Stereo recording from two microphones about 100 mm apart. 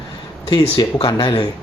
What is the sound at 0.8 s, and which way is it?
Speech, 55° left (ahead or behind).